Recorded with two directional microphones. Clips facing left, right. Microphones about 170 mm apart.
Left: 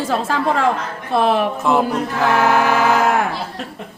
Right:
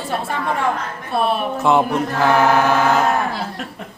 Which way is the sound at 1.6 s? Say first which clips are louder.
Right 1 dB; centre (ahead or behind).